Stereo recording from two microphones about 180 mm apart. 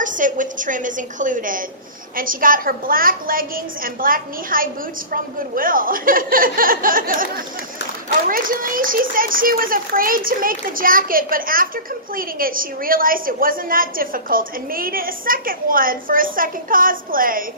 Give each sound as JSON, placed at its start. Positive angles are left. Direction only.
{"t": 0.0, "sound": "a woman's voice", "side_deg": -45}